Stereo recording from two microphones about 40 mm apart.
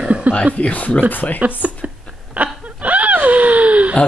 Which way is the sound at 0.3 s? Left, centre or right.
Right.